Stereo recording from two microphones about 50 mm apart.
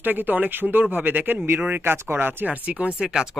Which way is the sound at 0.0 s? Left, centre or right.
Right.